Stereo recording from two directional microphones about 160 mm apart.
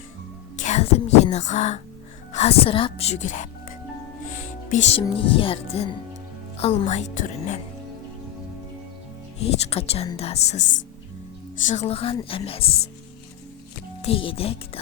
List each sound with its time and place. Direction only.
0.6 s a woman's voice: 45° left (ahead or behind)
9.6 s speech: 40° left (ahead or behind)
11.6 s speech: 45° left (ahead or behind)
12.1 s speech: 25° left (ahead or behind)
12.5 s speech: 35° left (ahead or behind)
14.0 s speech: 35° left (ahead or behind)